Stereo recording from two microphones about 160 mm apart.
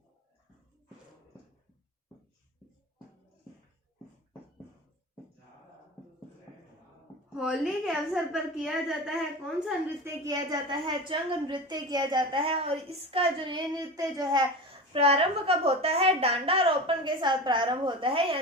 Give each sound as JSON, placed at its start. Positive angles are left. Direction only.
{"t": 7.3, "sound": "a woman's voice", "side_deg": -5}
{"t": 10.0, "sound": "a woman's voice", "side_deg": -25}
{"t": 14.9, "sound": "a woman's voice", "side_deg": -40}